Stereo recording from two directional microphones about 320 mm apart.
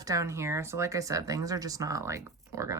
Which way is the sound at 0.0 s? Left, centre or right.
Centre.